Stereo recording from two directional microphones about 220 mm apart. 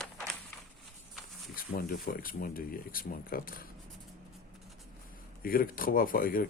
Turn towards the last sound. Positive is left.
turn(degrees=40)  # may be behind; listen again after turning